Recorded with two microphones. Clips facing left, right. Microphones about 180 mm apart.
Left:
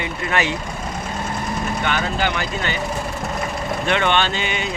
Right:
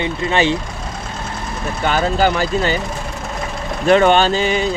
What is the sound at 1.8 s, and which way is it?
Speech, 40° right (ahead or behind).